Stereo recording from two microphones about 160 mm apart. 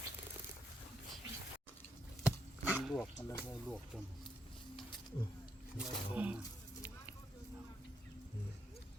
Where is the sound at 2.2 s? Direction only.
10° right (ahead or behind).